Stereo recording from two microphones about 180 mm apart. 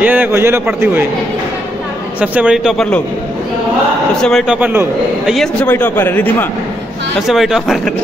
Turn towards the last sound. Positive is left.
turn(degrees=0)  # may be behind; listen again after turning